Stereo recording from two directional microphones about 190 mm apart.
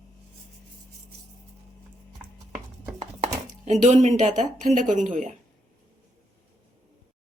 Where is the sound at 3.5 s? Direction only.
40° right (ahead or behind).